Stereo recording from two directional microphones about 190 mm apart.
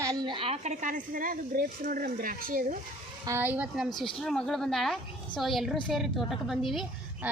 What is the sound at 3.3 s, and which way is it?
A woman's voice, 10° right (ahead or behind).